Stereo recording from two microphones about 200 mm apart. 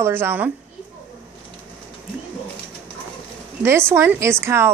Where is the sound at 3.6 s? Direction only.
10° right (ahead or behind).